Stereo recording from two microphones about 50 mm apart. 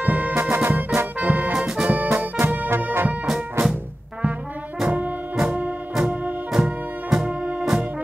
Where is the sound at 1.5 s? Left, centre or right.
Centre.